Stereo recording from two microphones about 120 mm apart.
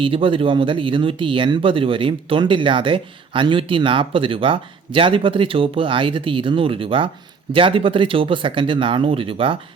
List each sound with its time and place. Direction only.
0.0 s speech: 45° right (ahead or behind)